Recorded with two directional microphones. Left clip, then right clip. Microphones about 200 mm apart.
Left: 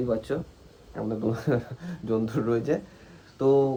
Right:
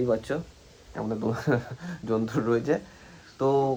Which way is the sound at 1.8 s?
35° right (ahead or behind).